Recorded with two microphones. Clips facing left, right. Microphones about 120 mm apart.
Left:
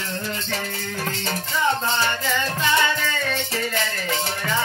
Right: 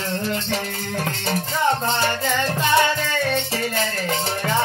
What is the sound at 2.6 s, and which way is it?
Music, 55° right (ahead or behind).